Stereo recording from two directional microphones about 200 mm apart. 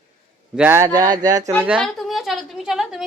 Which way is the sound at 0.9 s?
20° right (ahead or behind).